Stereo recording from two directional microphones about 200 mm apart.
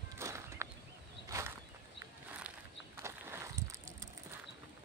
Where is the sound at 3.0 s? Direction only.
15° right (ahead or behind).